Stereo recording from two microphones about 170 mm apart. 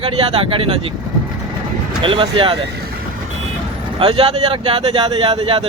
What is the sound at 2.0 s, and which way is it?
Speech, 30° right (ahead or behind).